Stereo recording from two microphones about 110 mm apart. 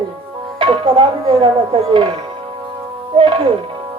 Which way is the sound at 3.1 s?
50° right (ahead or behind).